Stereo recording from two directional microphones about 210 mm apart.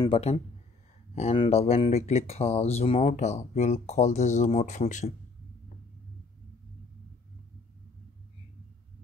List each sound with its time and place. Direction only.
0.0 s speech: 30° left (ahead or behind)